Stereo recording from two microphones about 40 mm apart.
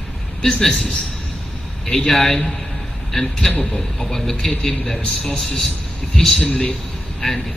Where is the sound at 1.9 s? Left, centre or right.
Centre.